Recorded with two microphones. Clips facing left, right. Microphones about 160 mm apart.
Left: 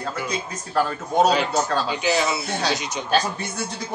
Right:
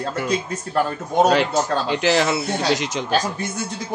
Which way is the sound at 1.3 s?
85° right.